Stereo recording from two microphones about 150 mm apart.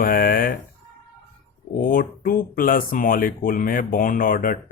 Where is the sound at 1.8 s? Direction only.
70° left (ahead or behind).